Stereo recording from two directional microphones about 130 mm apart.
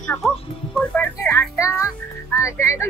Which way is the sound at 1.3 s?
20° left (ahead or behind).